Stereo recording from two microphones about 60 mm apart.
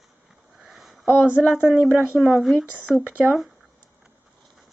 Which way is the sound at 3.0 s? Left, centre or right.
Right.